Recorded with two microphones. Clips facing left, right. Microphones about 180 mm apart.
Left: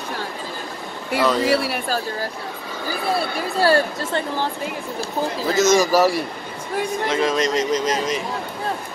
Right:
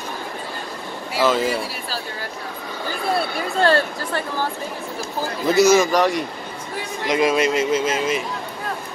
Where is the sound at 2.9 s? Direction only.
Centre (ahead or behind).